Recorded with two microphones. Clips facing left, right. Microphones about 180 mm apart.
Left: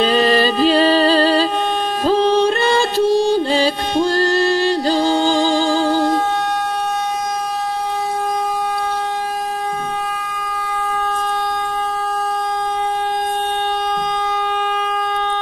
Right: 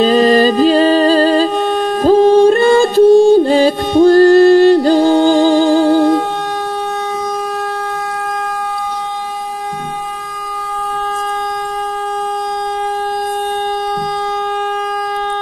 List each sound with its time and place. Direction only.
0.0 s music: 40° right (ahead or behind); by 6.0 s 60° right (ahead or behind)